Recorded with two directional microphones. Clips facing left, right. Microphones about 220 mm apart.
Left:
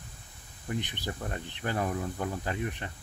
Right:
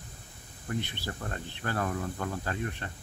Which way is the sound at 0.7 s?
15° left (ahead or behind).